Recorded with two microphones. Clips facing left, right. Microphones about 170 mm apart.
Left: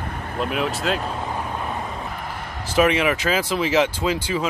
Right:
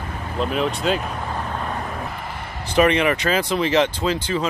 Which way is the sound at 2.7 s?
5° left (ahead or behind).